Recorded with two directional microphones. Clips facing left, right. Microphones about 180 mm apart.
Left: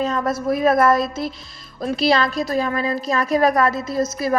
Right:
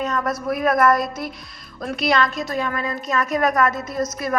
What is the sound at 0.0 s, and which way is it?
A woman's voice, 30° left (ahead or behind).